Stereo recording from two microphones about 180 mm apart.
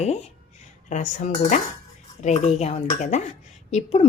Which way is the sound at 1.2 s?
40° left (ahead or behind).